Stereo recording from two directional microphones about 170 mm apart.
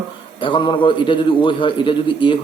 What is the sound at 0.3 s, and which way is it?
A man's voice, 30° left (ahead or behind).